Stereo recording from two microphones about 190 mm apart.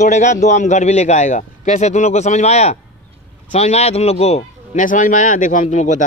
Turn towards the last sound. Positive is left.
turn(degrees=40)  # may be behind; listen again after turning